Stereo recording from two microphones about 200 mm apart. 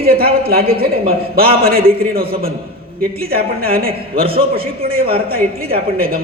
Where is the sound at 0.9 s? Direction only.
30° right (ahead or behind).